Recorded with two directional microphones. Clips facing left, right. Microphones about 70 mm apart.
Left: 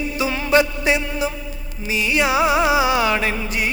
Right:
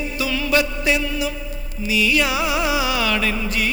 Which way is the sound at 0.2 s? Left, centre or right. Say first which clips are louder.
Left 3 dB; left.